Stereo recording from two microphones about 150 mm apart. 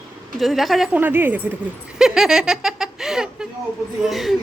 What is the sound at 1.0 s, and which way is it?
Speech, 10° right (ahead or behind).